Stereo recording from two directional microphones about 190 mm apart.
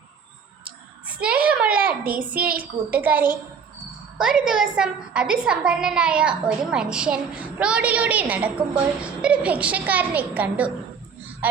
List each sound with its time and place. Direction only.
1.0 s a sound: 5° right (ahead or behind)
1.5 s child singing: 5° right (ahead or behind)
2.6 s a woman's voice: 10° right (ahead or behind)